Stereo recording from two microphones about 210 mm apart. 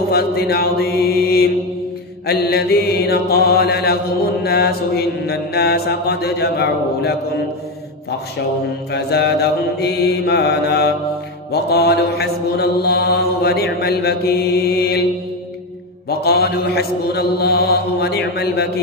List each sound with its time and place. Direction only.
0.1 s mantra: 50° left (ahead or behind)
8.9 s mantra: 50° left (ahead or behind)
16.1 s mantra: 50° left (ahead or behind)